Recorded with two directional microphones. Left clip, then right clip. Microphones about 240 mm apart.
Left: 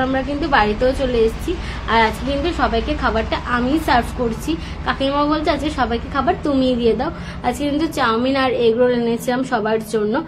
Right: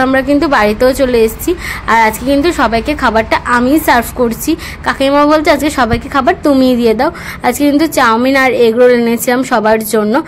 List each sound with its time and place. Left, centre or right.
0.0 s a woman's voice: right